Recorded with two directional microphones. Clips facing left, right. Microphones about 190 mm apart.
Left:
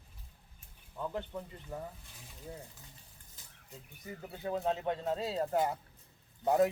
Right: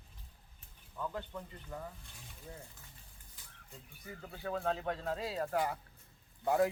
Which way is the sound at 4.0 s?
20° left (ahead or behind).